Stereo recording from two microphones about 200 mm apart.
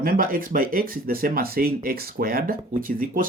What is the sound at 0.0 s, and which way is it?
Speech, 45° right (ahead or behind).